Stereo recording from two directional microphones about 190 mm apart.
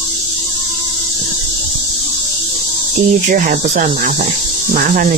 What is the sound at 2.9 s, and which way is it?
Speech, 40° right (ahead or behind).